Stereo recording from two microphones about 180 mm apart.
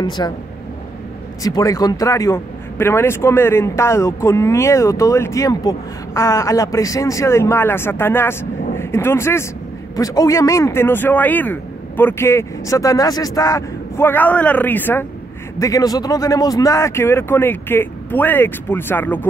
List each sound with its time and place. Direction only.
0.0 s speech: 25° left (ahead or behind)
1.4 s speech: 20° left (ahead or behind)